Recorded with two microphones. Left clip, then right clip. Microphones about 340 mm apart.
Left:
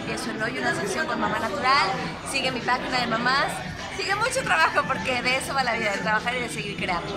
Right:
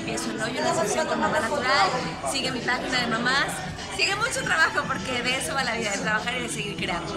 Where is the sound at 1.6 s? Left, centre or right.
Centre.